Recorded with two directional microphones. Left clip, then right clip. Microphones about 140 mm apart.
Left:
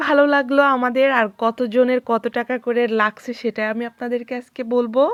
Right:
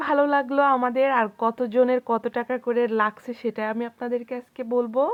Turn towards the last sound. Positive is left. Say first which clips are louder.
# left 5 dB
turn(degrees=35)  # may be behind; listen again after turning